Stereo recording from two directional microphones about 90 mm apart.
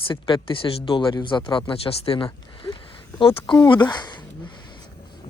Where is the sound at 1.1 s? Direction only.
60° left (ahead or behind); by 2.7 s 85° left.